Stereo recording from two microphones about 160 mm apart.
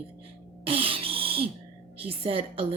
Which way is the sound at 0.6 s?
35° right (ahead or behind).